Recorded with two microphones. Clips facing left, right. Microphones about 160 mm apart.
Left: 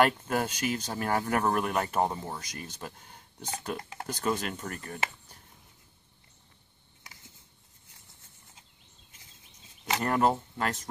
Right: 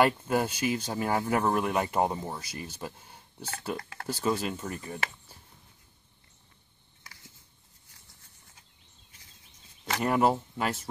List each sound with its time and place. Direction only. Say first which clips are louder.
0.0 s speech: right 1 dB; 10° right (ahead or behind)
3.7 s speech: even; 20° left (ahead or behind)
4.1 s speech: right 2 dB; 10° right (ahead or behind)
7.0 s a sound: even; 20° left (ahead or behind)
10.0 s speech: right 2 dB; 10° right (ahead or behind)